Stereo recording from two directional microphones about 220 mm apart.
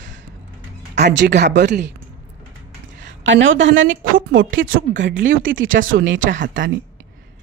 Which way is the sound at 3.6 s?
60° right (ahead or behind).